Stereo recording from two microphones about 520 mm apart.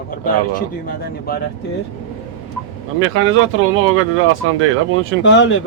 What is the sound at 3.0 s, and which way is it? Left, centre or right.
Speech, right.